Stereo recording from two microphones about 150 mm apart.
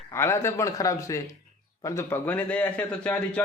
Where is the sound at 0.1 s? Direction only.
20° left (ahead or behind).